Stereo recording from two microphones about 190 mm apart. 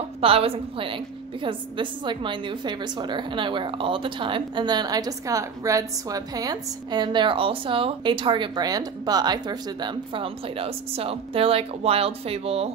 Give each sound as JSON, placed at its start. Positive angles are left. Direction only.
{"t": 0.2, "sound": "a woman's voice", "side_deg": -30}